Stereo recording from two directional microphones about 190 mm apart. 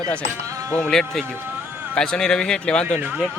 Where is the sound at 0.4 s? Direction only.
15° right (ahead or behind).